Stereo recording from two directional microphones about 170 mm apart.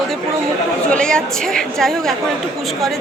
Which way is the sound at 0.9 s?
5° left (ahead or behind).